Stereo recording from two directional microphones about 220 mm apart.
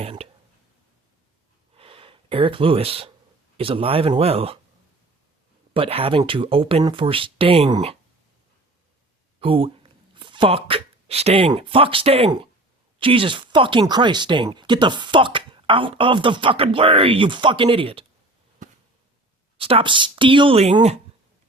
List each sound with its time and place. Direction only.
0.0 s a sound: 25° right (ahead or behind)
1.7 s gasp: 25° right (ahead or behind)
3.6 s speech: 25° right (ahead or behind)
5.7 s speech: 25° right (ahead or behind)
9.4 s speech: 25° right (ahead or behind)
19.5 s speech: 25° right (ahead or behind)